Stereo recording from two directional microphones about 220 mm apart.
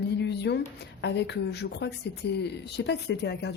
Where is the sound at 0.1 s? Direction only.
50° left (ahead or behind).